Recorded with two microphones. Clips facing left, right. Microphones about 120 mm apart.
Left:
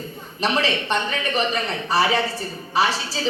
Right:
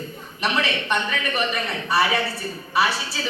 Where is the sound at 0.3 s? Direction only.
35° left (ahead or behind).